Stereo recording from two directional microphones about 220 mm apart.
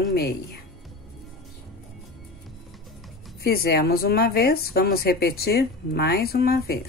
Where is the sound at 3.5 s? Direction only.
45° left (ahead or behind).